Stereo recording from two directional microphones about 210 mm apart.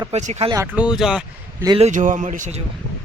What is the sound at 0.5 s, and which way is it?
Speech, 10° right (ahead or behind).